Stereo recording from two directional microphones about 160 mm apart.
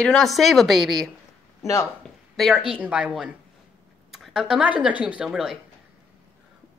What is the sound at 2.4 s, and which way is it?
A woman's voice, centre (ahead or behind).